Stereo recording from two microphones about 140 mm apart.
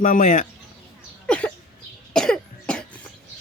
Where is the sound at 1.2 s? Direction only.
10° left (ahead or behind).